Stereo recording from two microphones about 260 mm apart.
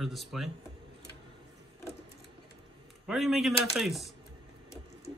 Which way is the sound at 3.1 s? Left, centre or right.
Centre.